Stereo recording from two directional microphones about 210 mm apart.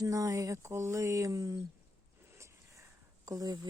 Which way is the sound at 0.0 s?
15° right (ahead or behind).